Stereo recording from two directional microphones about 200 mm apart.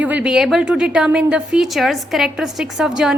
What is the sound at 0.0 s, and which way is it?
A woman's voice, 5° right (ahead or behind).